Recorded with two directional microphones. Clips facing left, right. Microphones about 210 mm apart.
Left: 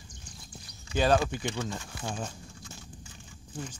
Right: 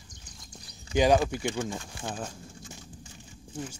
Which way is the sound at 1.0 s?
10° right (ahead or behind).